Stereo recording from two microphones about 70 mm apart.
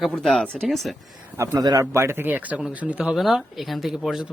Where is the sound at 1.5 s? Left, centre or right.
Right.